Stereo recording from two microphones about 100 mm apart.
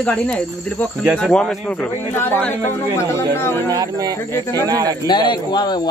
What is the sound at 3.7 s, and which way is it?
Speech, 40° right (ahead or behind).